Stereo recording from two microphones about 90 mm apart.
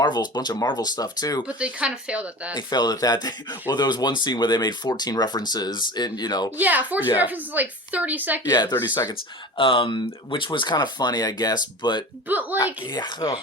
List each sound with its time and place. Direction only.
0.0 s speech: 55° left (ahead or behind)
1.5 s speech: 15° right (ahead or behind)
2.6 s speech: 50° left (ahead or behind)
6.6 s a woman's voice: 20° right (ahead or behind)
8.4 s speech: 50° left (ahead or behind)
8.7 s speech: 35° left (ahead or behind)
9.6 s speech: 70° left (ahead or behind); by 12.0 s 55° left (ahead or behind)
12.3 s a woman's voice: 20° right (ahead or behind)
12.9 s speech: 55° left (ahead or behind)